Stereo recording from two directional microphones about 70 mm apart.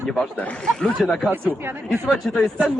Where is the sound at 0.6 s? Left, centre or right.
Centre.